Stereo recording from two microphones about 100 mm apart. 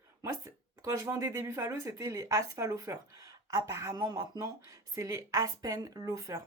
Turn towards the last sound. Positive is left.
turn(degrees=-30)  # may be behind; listen again after turning